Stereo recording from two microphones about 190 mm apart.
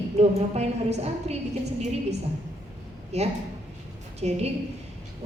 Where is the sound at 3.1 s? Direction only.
35° right (ahead or behind).